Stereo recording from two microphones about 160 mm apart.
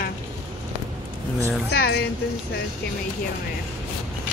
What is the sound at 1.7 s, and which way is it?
Speech, 80° left.